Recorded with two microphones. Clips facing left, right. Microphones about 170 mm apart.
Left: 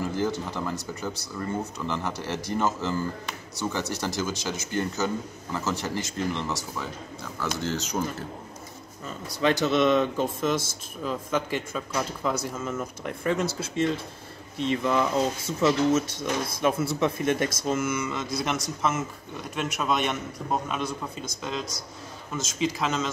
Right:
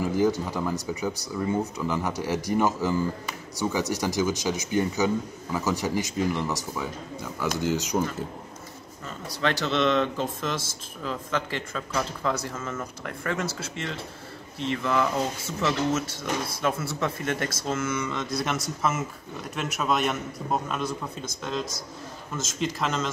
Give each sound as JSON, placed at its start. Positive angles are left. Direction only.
{"t": 0.0, "sound": "speech", "side_deg": -15}
{"t": 9.0, "sound": "speech", "side_deg": 15}